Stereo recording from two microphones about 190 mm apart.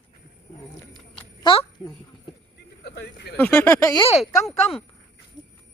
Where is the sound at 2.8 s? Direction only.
60° left (ahead or behind).